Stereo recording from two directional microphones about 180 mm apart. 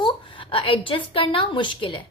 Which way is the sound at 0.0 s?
30° left (ahead or behind).